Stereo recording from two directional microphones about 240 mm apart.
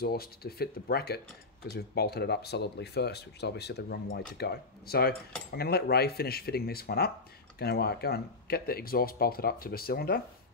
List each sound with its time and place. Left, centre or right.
0.0 s speech: left